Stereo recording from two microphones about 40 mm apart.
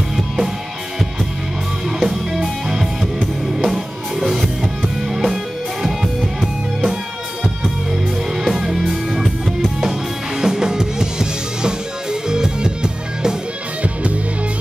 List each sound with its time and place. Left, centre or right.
1.9 s music: centre
8.5 s music: centre
9.8 s music: centre